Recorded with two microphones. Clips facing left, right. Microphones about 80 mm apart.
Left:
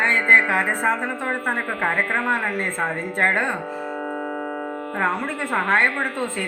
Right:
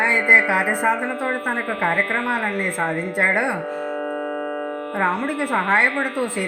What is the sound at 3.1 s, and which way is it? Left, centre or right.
Speech, centre.